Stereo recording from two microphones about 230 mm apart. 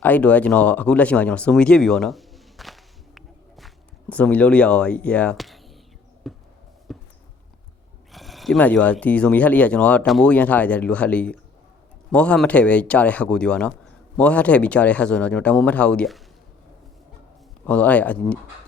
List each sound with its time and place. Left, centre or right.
0.0 s a sound: centre
4.1 s speech: centre
6.3 s basketball bounce: centre
6.9 s a sound: centre
8.1 s speech: centre
17.7 s speech: centre